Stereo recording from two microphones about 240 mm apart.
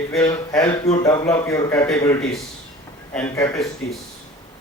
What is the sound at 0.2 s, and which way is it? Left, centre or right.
A man's voice, centre.